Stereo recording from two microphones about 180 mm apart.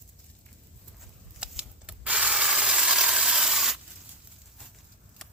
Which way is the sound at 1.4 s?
5° right (ahead or behind).